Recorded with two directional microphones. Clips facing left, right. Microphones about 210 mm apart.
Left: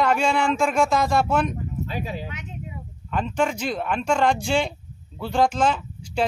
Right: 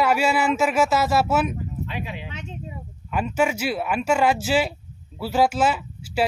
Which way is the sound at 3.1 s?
10° right (ahead or behind).